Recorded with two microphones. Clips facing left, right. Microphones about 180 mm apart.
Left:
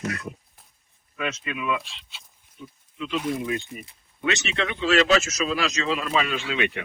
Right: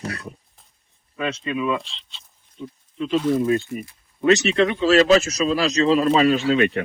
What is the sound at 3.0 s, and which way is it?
Speech, 40° right (ahead or behind).